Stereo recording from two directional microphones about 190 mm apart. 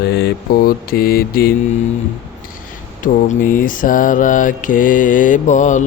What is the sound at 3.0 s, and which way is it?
Mantra, 45° left (ahead or behind).